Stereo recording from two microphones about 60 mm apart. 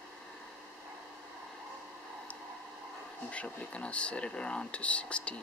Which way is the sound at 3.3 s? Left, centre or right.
Left.